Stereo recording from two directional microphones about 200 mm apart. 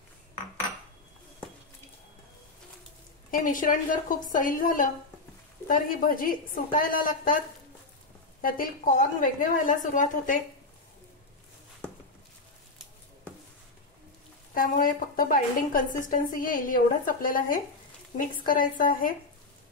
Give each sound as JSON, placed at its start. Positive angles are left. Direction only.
{"t": 3.3, "sound": "a woman's voice", "side_deg": 40}
{"t": 8.4, "sound": "a woman's voice", "side_deg": 45}
{"t": 14.5, "sound": "a woman's voice", "side_deg": 45}